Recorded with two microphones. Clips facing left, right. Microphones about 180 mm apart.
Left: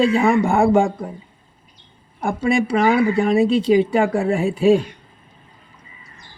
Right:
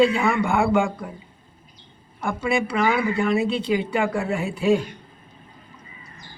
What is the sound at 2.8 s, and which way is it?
Speech, 40° left (ahead or behind).